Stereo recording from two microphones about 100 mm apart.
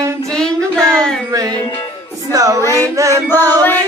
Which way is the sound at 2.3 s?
35° right (ahead or behind).